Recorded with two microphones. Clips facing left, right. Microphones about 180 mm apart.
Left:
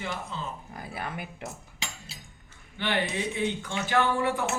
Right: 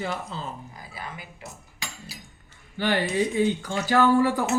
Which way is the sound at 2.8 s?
40° right (ahead or behind).